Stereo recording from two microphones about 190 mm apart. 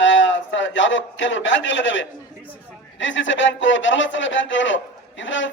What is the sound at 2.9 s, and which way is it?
A man's voice, 80° left.